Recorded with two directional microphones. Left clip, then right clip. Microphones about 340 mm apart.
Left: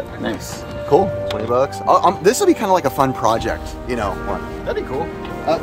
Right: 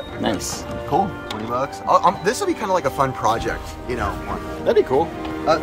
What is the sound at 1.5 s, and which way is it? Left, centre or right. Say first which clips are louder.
Speech: left 3 dB; left.